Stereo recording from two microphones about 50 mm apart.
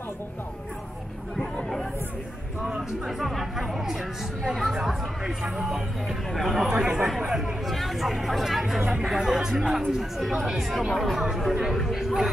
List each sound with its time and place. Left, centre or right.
3.1 s speech: centre
6.7 s speech: centre
7.6 s speech: centre
8.8 s speech: centre